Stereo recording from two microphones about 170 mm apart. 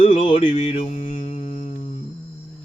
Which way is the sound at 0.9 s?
50° left (ahead or behind).